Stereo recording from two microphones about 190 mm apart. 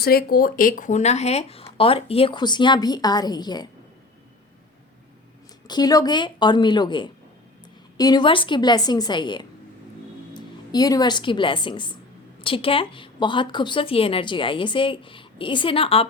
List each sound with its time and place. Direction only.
0.0 s speech: 55° left (ahead or behind); by 3.7 s 20° left (ahead or behind)
5.6 s a woman's voice: 20° left (ahead or behind)